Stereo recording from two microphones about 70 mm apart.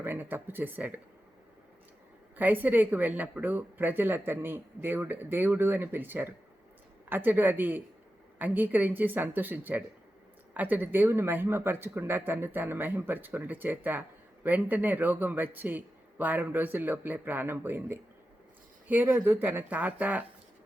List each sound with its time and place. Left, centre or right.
0.0 s speech: right
2.3 s speech: right